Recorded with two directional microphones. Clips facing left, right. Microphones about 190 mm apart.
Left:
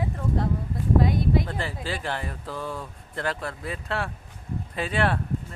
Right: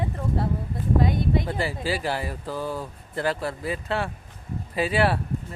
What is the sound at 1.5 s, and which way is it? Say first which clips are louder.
Speech: right 4 dB; 10° right (ahead or behind).